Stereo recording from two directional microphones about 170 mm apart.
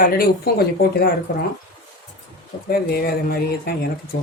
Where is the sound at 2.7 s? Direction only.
65° left (ahead or behind).